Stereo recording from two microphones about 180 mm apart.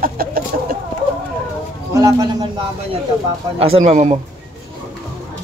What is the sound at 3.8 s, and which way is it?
Speech, 40° right (ahead or behind).